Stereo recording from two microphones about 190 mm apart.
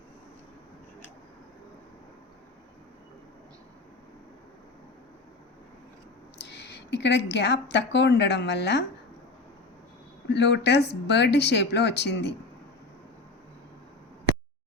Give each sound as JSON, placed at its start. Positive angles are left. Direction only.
{"t": 6.4, "sound": "speech", "side_deg": 65}
{"t": 10.3, "sound": "speech", "side_deg": 65}